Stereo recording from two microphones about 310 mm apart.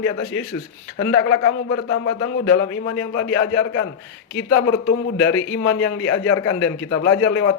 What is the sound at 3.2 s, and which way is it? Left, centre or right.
Speech, left.